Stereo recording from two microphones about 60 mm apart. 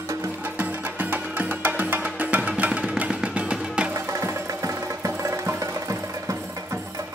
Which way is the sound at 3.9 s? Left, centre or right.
Right.